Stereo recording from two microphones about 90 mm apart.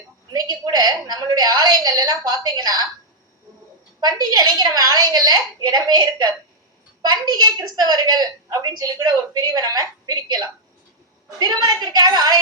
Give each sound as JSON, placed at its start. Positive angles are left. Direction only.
{"t": 0.3, "sound": "a woman's voice", "side_deg": -50}
{"t": 4.0, "sound": "a woman's voice", "side_deg": -50}